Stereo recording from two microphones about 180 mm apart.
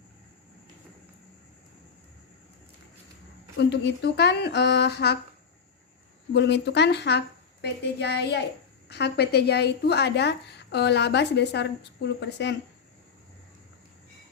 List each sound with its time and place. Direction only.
3.6 s a woman's voice: 65° left (ahead or behind)
6.3 s a woman's voice: 70° left (ahead or behind)